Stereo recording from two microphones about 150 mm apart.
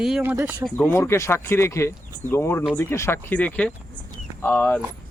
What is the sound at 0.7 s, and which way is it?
Speech, 5° left (ahead or behind).